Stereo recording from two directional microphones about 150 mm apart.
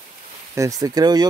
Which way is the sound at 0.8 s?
25° right (ahead or behind).